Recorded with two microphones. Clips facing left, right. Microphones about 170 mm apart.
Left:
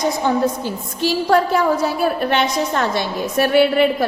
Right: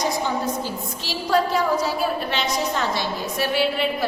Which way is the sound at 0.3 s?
55° left (ahead or behind).